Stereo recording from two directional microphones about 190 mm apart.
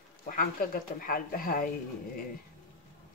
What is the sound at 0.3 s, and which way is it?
Speech, 50° left (ahead or behind).